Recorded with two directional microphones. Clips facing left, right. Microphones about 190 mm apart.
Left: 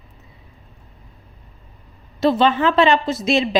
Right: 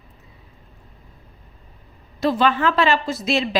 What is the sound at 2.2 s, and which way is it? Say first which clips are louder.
A woman's voice: left 3 dB; 25° left (ahead or behind).